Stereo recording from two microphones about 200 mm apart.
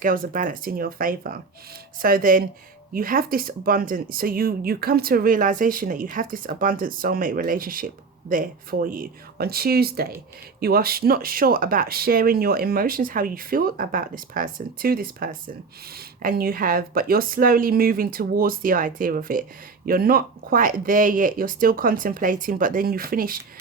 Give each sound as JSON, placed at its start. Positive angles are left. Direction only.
{"t": 0.0, "sound": "speech", "side_deg": -45}